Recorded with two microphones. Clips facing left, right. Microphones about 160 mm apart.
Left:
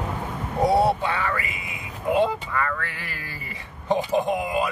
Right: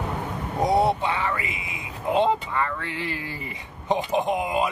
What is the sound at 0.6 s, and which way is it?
Speech, 20° right (ahead or behind).